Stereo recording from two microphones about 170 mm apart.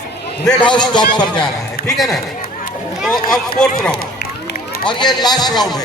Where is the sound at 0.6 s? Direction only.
25° left (ahead or behind).